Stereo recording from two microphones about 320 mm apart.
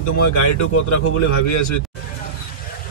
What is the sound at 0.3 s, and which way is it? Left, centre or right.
A man's voice, left.